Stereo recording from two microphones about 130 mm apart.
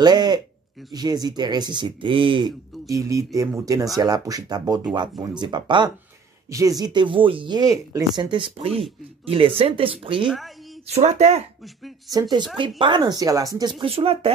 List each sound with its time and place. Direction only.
0.0 s speech: 30° right (ahead or behind)
2.9 s speech: 25° right (ahead or behind); by 10.3 s 40° right (ahead or behind)
10.9 s speech: 60° right (ahead or behind)
12.1 s speech: 30° right (ahead or behind)
13.8 s speech: 50° right (ahead or behind)